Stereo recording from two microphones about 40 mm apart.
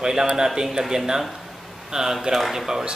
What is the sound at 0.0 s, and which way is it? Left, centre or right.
Speech, centre.